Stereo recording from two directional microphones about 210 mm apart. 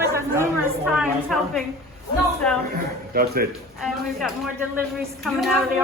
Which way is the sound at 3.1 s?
45° right (ahead or behind).